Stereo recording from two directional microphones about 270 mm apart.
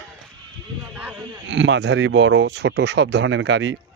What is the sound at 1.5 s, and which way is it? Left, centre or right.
Speech, right.